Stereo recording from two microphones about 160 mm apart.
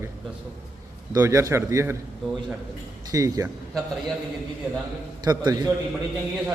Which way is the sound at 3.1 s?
20° right (ahead or behind).